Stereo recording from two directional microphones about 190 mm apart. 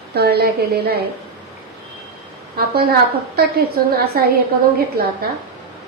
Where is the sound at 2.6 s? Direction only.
55° right (ahead or behind).